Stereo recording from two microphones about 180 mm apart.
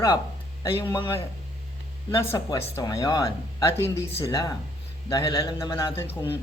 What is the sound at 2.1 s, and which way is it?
A man's voice, 15° left (ahead or behind).